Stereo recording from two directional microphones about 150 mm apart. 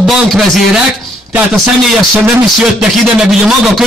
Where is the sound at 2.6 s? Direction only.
Centre (ahead or behind).